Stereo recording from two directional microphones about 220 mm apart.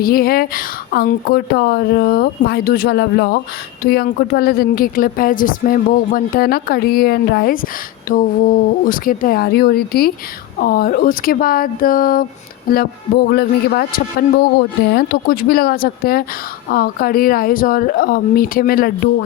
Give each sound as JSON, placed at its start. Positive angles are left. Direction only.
{"t": 0.0, "sound": "a woman's voice", "side_deg": 45}